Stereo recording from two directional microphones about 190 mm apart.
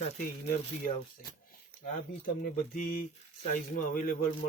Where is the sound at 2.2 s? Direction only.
45° left (ahead or behind).